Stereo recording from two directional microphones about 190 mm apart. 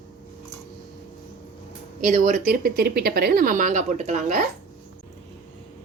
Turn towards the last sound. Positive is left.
turn(degrees=-40)  # may be behind; listen again after turning